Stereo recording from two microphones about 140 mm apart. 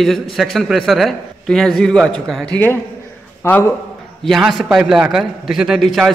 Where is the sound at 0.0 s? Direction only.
Centre (ahead or behind); by 3.6 s 20° left (ahead or behind).